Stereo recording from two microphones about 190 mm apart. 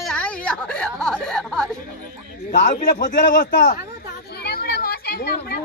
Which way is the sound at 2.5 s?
40° left (ahead or behind).